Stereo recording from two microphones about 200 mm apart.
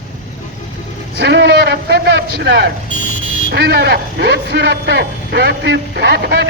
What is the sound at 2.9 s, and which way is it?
Buzzer, 40° left (ahead or behind).